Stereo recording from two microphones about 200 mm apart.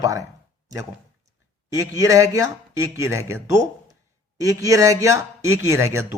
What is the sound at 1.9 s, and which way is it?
A man's voice, 15° right (ahead or behind).